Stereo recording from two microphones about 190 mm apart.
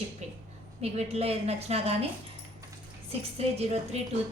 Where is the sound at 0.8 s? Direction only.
35° right (ahead or behind).